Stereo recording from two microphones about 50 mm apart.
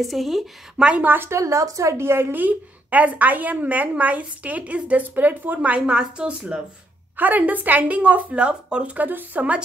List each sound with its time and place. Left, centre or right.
0.0 s speech: centre
0.7 s speech: right
1.0 s speech: right
1.3 s a woman's voice: right
2.3 s speech: right
5.0 s speech: right; by 6.6 s centre
7.2 s speech: right
8.9 s speech: right